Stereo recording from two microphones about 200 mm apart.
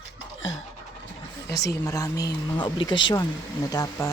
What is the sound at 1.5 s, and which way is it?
Speech, 55° left (ahead or behind).